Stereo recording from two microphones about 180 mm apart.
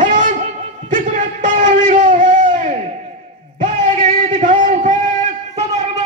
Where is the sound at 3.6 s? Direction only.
45° right (ahead or behind).